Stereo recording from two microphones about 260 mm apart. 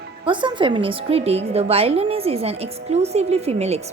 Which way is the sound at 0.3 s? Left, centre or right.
Centre.